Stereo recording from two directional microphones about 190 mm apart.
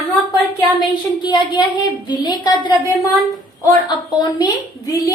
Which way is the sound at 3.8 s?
20° left (ahead or behind).